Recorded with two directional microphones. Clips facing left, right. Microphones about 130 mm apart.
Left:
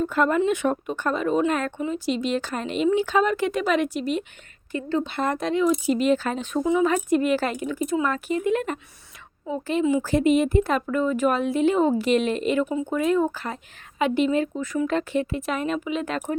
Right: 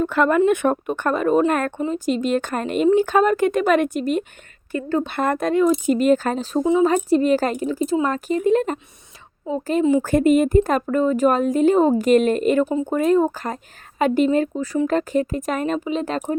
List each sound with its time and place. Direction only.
0.0 s speech: 70° right (ahead or behind); by 16.2 s 35° right (ahead or behind)